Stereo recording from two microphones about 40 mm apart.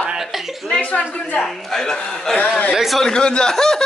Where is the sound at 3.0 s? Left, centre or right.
Left.